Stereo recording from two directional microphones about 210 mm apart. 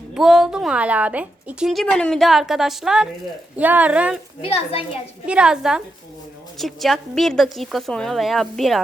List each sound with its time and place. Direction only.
0.1 s a woman's voice: centre (ahead or behind)
4.4 s a child's voice: 30° left (ahead or behind)
5.2 s a woman's voice: 5° right (ahead or behind)